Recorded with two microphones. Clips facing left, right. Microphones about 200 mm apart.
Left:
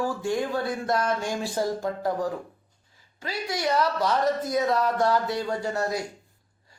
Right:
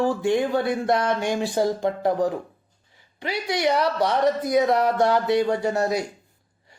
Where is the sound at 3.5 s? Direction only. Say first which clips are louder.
Right 3 dB; 65° right (ahead or behind).